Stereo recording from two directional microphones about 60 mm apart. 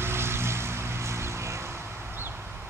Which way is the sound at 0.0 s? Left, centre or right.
Right.